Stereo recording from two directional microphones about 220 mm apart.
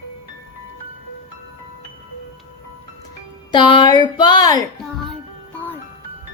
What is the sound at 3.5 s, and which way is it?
Speech, 20° left (ahead or behind).